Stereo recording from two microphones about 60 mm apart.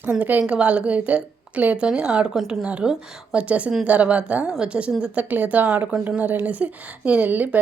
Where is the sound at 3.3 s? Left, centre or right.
Right.